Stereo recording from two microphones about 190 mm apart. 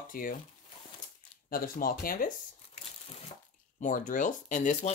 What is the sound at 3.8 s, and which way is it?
Speech, 45° left (ahead or behind).